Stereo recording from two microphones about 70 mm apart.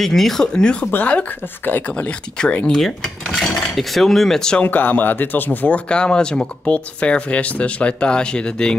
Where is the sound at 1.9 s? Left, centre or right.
Centre.